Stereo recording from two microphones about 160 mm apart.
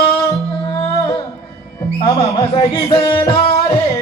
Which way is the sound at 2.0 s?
30° left (ahead or behind).